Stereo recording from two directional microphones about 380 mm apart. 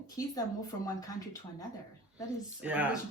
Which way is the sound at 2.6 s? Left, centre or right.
Centre.